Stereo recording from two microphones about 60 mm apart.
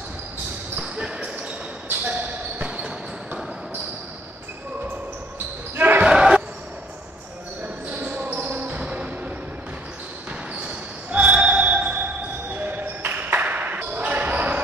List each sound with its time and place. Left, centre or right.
0.7 s basketball bounce: centre
5.8 s basketball bounce: right
6.0 s basketball bounce: centre
7.6 s basketball bounce: right
10.5 s basketball bounce: right
12.5 s ping: right